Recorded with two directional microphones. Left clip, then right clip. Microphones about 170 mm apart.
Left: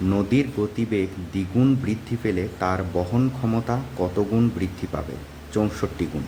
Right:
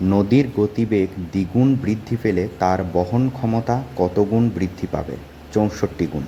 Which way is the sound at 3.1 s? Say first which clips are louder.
Right 3 dB; 5° right (ahead or behind).